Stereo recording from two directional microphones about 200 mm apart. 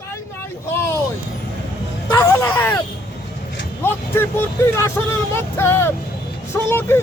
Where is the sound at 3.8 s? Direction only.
10° left (ahead or behind).